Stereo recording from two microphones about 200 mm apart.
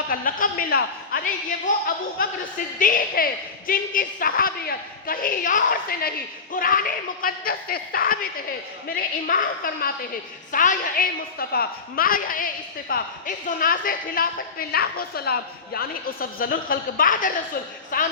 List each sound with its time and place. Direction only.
0.1 s a woman's voice: 45° left (ahead or behind)
2.7 s a woman's voice: 45° left (ahead or behind)